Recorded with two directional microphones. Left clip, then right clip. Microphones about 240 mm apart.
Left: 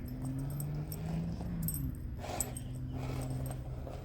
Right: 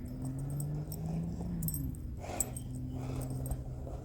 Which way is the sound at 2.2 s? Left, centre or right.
Left.